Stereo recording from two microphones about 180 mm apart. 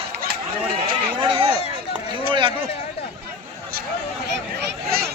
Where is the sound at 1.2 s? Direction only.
30° right (ahead or behind).